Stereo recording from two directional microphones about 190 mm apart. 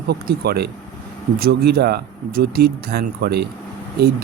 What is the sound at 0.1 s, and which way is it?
Speech, 55° right (ahead or behind).